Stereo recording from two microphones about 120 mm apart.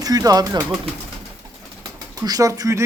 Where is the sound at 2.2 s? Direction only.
30° right (ahead or behind).